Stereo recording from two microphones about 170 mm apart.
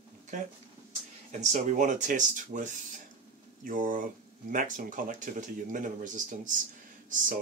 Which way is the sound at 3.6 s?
50° right (ahead or behind).